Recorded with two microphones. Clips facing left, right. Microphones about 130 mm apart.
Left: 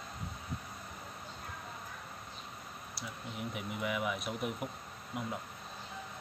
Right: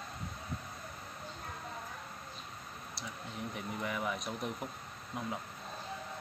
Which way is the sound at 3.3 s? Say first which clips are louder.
Even; 10° left (ahead or behind).